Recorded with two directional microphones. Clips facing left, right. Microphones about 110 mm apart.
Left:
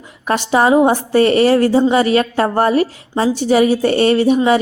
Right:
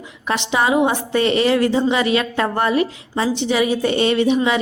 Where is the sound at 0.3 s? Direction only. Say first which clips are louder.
Left 5 dB; 45° left (ahead or behind).